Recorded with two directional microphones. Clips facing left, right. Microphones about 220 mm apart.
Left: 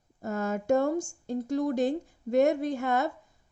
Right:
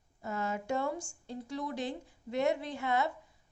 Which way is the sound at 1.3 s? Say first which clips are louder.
Left 10 dB; 45° left (ahead or behind).